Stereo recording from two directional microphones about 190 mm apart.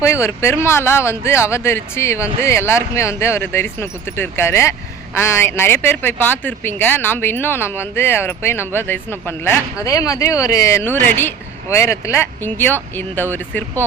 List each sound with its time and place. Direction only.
0.0 s speech: 15° left (ahead or behind)